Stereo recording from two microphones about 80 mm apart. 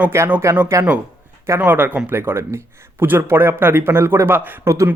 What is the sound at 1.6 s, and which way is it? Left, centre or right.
Speech, right.